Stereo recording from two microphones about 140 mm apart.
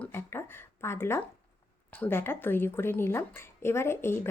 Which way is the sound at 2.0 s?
15° left (ahead or behind).